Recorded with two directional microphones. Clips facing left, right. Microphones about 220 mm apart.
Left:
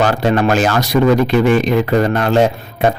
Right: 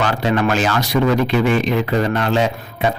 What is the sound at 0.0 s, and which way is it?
Speech, 45° left (ahead or behind).